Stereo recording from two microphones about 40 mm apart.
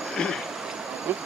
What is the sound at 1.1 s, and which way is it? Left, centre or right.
Speech, right.